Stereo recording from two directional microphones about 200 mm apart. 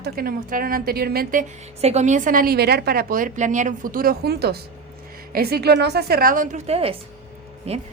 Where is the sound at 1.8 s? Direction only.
35° right (ahead or behind).